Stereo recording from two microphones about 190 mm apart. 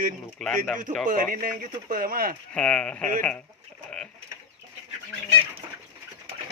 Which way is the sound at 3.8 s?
5° left (ahead or behind).